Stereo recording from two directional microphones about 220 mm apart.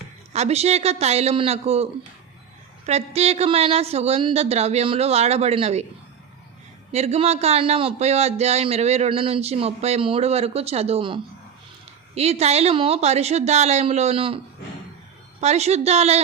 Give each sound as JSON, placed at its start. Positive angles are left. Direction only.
{"t": 0.3, "sound": "a man's voice", "side_deg": -30}
{"t": 6.9, "sound": "a man's voice", "side_deg": -30}
{"t": 15.4, "sound": "a man's voice", "side_deg": -30}